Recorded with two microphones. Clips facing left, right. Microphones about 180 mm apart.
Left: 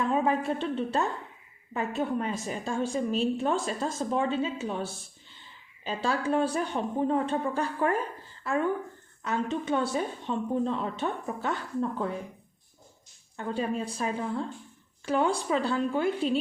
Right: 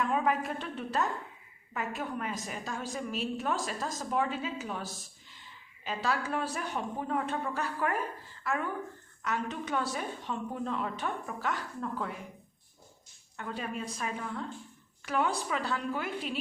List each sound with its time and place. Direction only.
0.0 s a woman's voice: 25° left (ahead or behind)
13.3 s a woman's voice: 30° left (ahead or behind)